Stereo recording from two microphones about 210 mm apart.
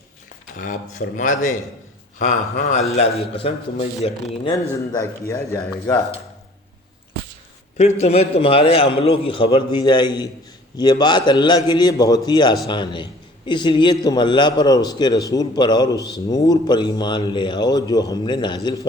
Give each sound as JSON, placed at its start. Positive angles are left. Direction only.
{"t": 0.6, "sound": "a man's voice", "side_deg": 40}
{"t": 4.5, "sound": "a man's voice", "side_deg": 15}
{"t": 7.8, "sound": "a man's voice", "side_deg": 30}